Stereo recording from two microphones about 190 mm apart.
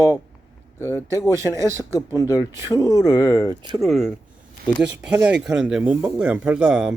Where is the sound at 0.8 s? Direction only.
15° left (ahead or behind).